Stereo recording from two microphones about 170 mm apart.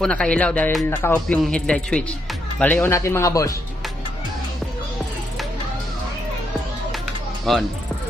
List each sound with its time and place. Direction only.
0.0 s a man's voice: 5° left (ahead or behind)
7.5 s a man's voice: centre (ahead or behind)